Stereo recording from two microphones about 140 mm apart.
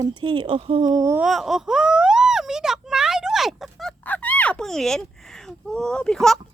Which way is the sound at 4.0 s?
10° left (ahead or behind).